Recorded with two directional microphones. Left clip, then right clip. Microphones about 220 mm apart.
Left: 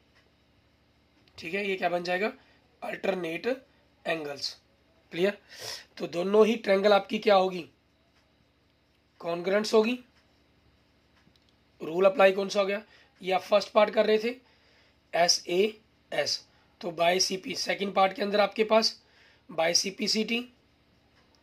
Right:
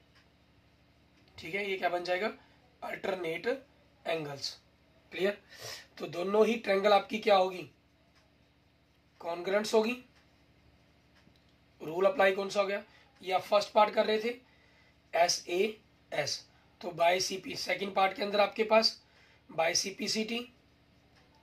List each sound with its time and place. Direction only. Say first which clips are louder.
1.3 s speech: left 4 dB; 50° left (ahead or behind)
9.2 s speech: left 4 dB; 50° left (ahead or behind)
11.8 s speech: left 5 dB; 50° left (ahead or behind)